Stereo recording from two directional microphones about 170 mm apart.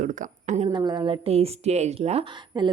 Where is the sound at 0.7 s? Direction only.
25° right (ahead or behind).